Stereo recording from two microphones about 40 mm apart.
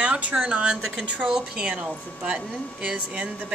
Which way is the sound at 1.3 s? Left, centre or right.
Centre.